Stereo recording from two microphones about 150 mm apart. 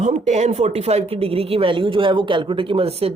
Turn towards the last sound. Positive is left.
turn(degrees=-40)  # may be behind; listen again after turning